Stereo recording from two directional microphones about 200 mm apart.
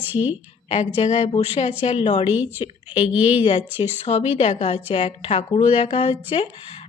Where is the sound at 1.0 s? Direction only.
35° left (ahead or behind).